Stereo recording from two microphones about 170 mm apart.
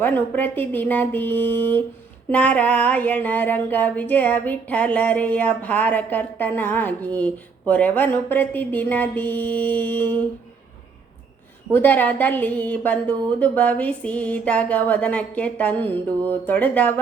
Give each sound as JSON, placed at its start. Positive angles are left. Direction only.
{"t": 0.0, "sound": "a woman's voice", "side_deg": 10}
{"t": 11.7, "sound": "a woman's voice", "side_deg": 10}